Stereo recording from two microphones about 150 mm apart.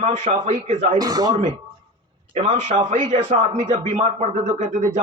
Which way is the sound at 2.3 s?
50° right (ahead or behind).